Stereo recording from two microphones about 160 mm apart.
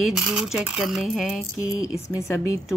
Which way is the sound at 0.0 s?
Centre (ahead or behind).